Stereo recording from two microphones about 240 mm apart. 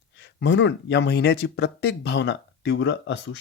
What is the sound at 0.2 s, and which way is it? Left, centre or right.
Speech, left.